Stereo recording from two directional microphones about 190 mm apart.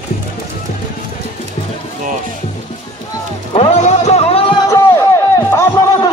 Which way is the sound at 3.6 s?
35° left (ahead or behind).